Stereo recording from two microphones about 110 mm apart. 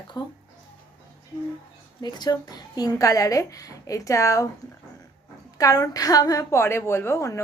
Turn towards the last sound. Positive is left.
turn(degrees=25)  # may be behind; listen again after turning